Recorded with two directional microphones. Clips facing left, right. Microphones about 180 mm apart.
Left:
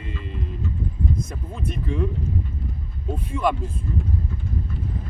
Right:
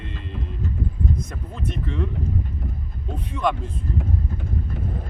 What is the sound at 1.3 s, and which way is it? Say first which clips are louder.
Speech: even; 10° left (ahead or behind).